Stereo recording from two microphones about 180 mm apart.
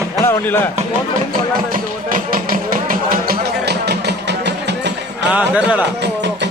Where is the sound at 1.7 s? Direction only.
50° right (ahead or behind); by 4.9 s 70° right (ahead or behind).